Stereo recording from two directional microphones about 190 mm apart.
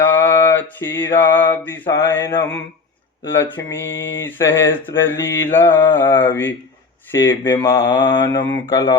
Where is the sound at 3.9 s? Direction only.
75° left (ahead or behind).